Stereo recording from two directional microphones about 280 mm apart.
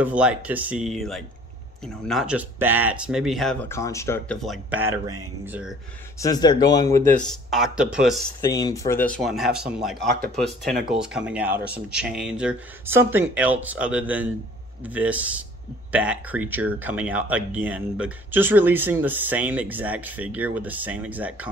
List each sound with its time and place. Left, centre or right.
0.0 s speech: centre
6.1 s speech: centre
7.2 s speech: centre
8.4 s speech: centre